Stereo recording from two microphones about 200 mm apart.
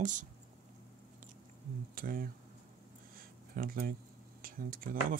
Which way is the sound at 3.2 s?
45° right (ahead or behind).